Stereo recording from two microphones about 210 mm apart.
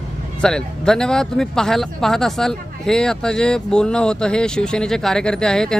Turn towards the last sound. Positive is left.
turn(degrees=5)  # may be behind; listen again after turning